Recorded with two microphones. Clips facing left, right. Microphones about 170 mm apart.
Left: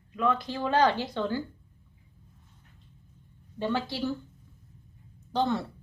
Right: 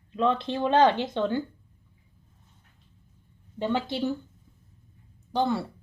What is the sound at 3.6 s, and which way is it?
Speech, 20° right (ahead or behind).